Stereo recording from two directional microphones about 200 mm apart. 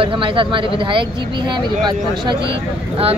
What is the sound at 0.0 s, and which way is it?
Speech, 25° right (ahead or behind).